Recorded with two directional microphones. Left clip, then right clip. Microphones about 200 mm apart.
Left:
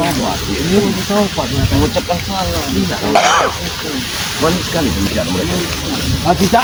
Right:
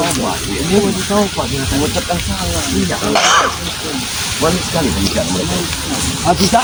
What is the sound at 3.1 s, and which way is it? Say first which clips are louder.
Stir: even; 50° left (ahead or behind).